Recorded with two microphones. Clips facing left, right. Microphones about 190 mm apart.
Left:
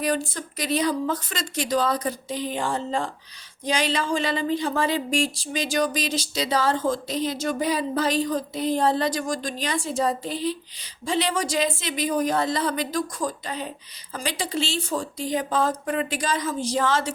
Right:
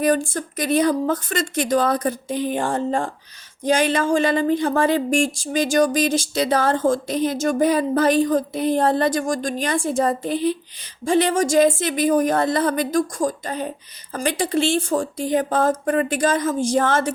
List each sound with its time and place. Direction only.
0.0 s speech: 50° right (ahead or behind)